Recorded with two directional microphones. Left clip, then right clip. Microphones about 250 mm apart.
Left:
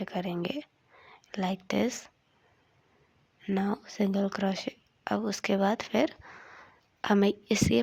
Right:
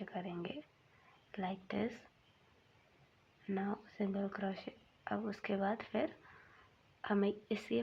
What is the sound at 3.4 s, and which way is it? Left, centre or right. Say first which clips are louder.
Speech: left 9 dB; left.